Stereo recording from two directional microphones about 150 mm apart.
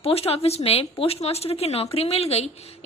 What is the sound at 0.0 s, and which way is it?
A woman's voice, 40° left (ahead or behind).